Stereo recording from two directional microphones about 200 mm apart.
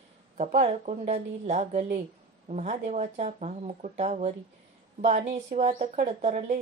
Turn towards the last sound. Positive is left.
turn(degrees=-35)  # may be behind; listen again after turning